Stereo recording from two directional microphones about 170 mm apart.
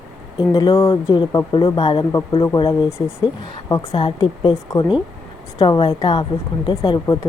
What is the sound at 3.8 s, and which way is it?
Speech, 35° left (ahead or behind).